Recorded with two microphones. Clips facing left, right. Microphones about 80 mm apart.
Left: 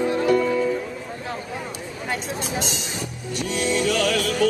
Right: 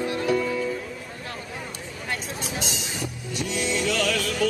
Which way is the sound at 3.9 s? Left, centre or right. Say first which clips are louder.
Left 3 dB; centre.